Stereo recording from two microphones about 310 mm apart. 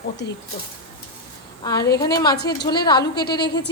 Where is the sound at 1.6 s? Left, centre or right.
Centre.